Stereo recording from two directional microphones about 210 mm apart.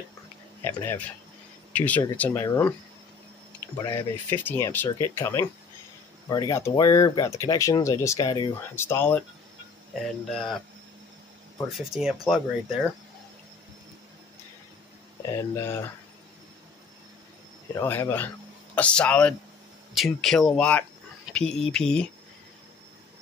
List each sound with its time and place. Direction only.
0.7 s speech: 10° left (ahead or behind)
3.7 s speech: 15° left (ahead or behind)
10.3 s speech: 5° left (ahead or behind)
11.7 s speech: centre (ahead or behind)
15.3 s speech: 10° left (ahead or behind)
17.7 s speech: 10° left (ahead or behind)